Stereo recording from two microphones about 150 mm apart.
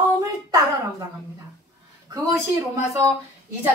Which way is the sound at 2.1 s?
20° right (ahead or behind).